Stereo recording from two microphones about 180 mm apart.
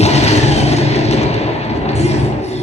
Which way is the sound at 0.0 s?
35° left (ahead or behind).